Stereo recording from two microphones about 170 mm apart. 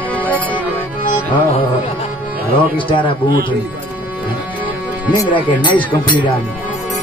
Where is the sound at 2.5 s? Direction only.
30° left (ahead or behind).